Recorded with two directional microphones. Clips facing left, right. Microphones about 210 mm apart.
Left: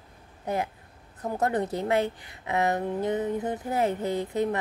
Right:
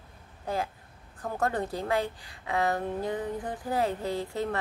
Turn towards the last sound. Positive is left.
turn(degrees=20)  # may be behind; listen again after turning